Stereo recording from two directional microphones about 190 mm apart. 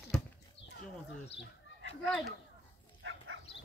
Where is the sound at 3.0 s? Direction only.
90° right.